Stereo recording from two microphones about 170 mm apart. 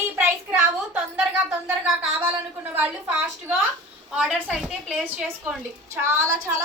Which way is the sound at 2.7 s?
10° right (ahead or behind).